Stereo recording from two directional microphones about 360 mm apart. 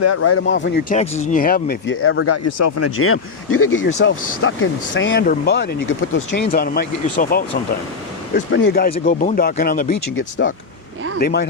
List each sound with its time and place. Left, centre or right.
0.0 s speech: left
8.4 s speech: left